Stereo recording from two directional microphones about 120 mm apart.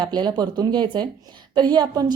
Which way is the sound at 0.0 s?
35° right (ahead or behind).